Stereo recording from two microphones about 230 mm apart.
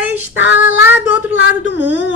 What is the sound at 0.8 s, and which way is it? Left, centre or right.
Speech, centre.